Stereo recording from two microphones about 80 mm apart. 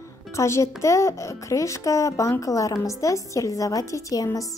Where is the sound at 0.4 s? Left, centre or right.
Left.